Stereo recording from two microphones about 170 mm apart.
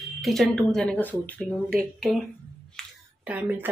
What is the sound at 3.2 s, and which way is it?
Speech, 10° right (ahead or behind).